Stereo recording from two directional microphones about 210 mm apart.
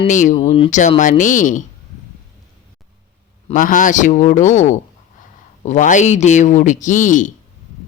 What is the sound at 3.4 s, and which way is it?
Speech, 40° left (ahead or behind).